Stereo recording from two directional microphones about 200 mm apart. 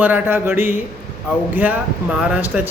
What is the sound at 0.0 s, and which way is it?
Speech, 10° right (ahead or behind).